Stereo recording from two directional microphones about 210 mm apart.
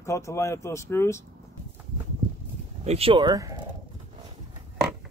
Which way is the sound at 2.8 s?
30° right (ahead or behind).